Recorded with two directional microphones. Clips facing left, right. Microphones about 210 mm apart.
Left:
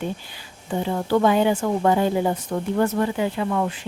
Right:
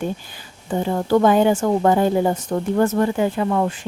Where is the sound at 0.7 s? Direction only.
45° right (ahead or behind).